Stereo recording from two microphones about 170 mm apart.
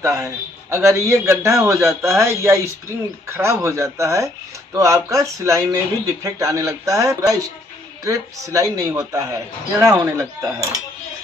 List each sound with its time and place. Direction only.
0.0 s a man's voice: 15° right (ahead or behind)